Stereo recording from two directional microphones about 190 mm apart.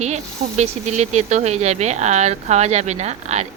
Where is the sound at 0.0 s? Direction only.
35° right (ahead or behind).